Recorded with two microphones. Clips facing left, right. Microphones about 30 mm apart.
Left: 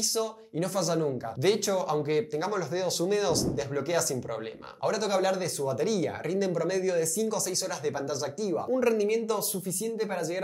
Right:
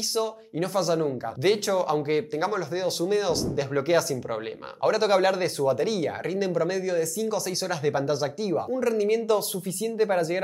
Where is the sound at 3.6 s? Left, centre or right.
Right.